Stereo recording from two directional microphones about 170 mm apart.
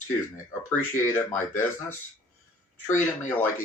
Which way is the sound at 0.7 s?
15° left (ahead or behind).